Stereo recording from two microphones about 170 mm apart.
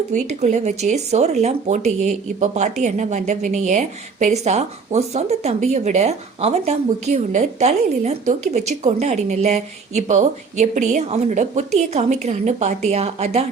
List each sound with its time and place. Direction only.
0.1 s speech: 45° right (ahead or behind)